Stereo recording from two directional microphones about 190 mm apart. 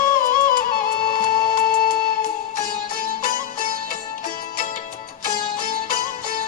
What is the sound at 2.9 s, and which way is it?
Music, 50° left (ahead or behind).